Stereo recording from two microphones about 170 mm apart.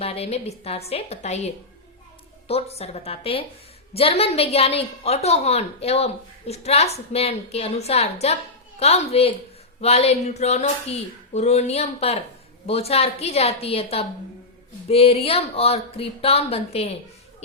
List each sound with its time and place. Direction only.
0.0 s a woman's voice: 35° left (ahead or behind)
2.5 s a woman's voice: 35° left (ahead or behind)